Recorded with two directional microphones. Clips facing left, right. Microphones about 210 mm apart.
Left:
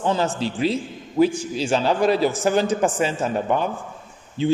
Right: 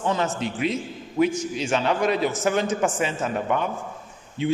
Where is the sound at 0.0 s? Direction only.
30° left (ahead or behind).